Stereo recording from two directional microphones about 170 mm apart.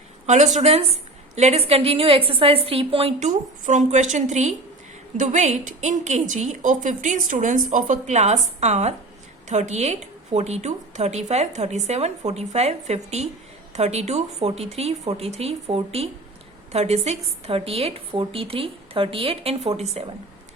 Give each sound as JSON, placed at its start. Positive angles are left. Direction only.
{"t": 0.3, "sound": "a woman's voice", "side_deg": -45}